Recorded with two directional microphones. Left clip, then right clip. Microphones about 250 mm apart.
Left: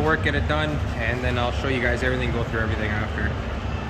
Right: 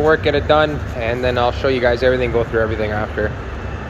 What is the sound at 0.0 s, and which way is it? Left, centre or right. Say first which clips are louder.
Speech: right 8 dB; centre.